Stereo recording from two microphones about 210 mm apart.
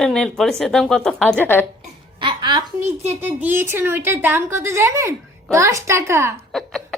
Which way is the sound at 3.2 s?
10° right (ahead or behind).